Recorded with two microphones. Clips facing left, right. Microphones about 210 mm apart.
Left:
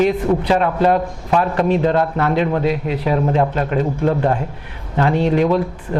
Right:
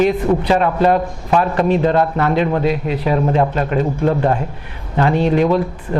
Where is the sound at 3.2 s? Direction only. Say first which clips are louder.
Right 1 dB; 30° right (ahead or behind).